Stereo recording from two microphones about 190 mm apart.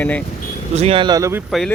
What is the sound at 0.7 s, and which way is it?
Speech, 30° right (ahead or behind).